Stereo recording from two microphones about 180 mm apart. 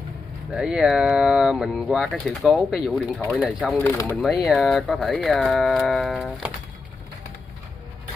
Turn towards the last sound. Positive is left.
turn(degrees=0)  # may be behind; listen again after turning